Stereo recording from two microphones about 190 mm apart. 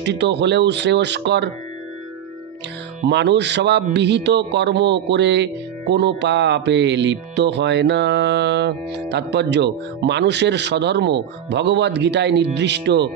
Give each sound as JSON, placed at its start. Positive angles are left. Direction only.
{"t": 0.0, "sound": "music", "side_deg": -65}
{"t": 3.1, "sound": "music", "side_deg": -65}